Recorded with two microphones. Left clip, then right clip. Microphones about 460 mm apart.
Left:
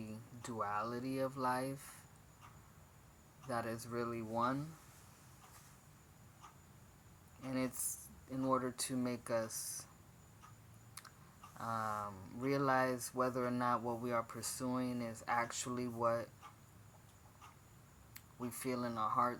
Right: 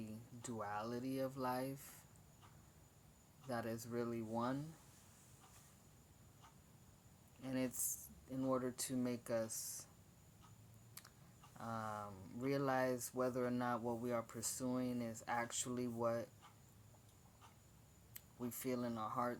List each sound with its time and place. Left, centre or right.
0.0 s speech: right
3.4 s speech: right
7.4 s speech: right
11.5 s speech: right
18.1 s speech: right